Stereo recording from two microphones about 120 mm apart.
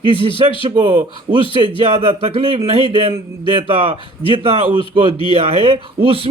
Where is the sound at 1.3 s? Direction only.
90° right.